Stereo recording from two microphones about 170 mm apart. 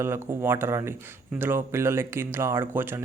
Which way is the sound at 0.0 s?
15° right (ahead or behind).